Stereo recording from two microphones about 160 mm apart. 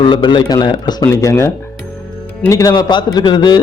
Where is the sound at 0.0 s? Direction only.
30° left (ahead or behind).